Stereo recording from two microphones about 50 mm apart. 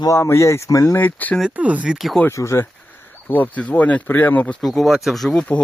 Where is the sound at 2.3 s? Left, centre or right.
Left.